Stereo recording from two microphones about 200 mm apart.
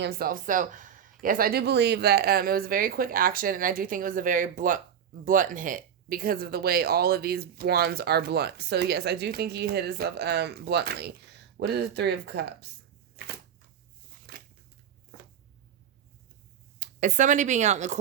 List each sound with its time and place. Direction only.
0.0 s speech: 50° right (ahead or behind)
14.3 s scissors: 50° right (ahead or behind)
16.8 s speech: 40° right (ahead or behind)